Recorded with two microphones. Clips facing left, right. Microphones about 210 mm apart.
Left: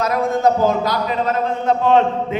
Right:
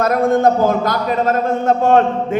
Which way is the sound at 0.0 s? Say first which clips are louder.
Right 4 dB; 50° right (ahead or behind).